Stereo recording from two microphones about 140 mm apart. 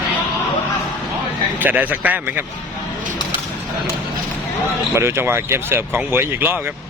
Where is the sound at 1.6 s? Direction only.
10° right (ahead or behind).